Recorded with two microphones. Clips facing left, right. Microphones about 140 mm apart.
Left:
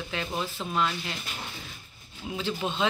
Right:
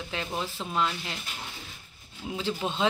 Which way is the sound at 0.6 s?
Centre (ahead or behind).